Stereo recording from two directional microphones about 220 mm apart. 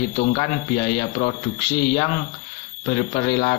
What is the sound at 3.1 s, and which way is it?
Speech, 30° left (ahead or behind).